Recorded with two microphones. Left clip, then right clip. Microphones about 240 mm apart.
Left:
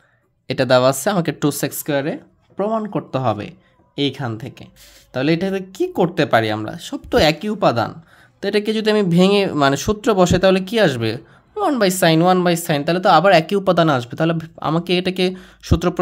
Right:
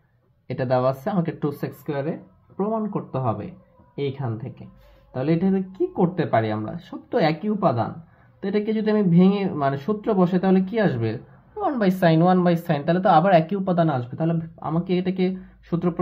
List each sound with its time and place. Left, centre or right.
0.5 s speech: left